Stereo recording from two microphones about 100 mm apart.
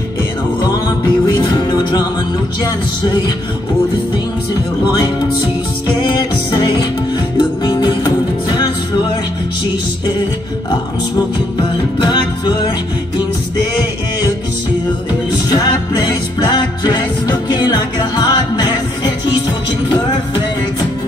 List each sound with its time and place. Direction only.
1.0 s music: 55° left (ahead or behind)
5.9 s music: 55° left (ahead or behind)
7.3 s music: 50° left (ahead or behind)
11.5 s music: 55° left (ahead or behind)
15.5 s music: 50° left (ahead or behind)